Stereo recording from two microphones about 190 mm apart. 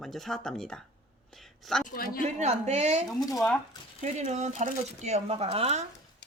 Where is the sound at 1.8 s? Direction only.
45° left (ahead or behind).